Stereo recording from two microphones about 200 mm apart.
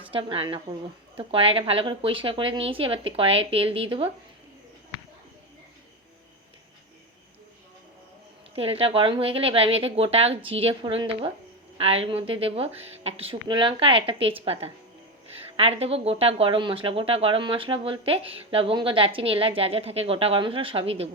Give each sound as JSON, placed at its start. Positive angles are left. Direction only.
{"t": 0.0, "sound": "speech", "side_deg": -25}
{"t": 8.5, "sound": "speech", "side_deg": -30}